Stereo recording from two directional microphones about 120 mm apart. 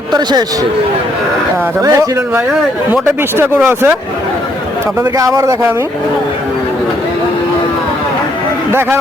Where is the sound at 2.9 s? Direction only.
15° right (ahead or behind).